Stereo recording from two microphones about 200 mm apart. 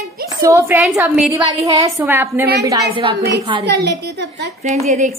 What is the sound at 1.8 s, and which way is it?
Speech, 10° right (ahead or behind).